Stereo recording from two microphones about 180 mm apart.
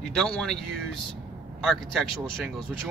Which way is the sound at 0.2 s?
5° left (ahead or behind).